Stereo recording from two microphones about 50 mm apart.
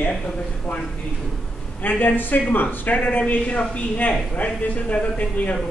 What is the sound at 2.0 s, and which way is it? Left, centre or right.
A man's voice, left.